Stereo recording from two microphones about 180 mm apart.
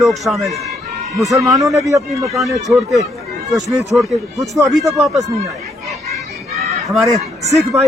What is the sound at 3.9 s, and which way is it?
Speech, centre (ahead or behind).